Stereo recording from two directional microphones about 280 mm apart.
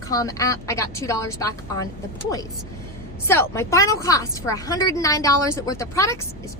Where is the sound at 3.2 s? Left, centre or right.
Centre.